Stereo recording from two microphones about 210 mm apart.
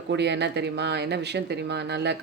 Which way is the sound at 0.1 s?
55° right (ahead or behind).